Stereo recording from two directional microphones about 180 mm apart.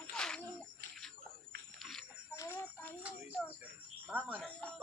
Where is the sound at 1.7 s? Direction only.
Centre (ahead or behind).